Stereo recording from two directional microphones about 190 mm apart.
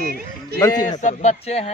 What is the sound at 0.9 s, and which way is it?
Speech, 40° left (ahead or behind).